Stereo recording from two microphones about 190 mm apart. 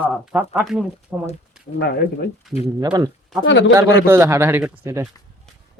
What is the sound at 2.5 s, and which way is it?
Speech, centre (ahead or behind).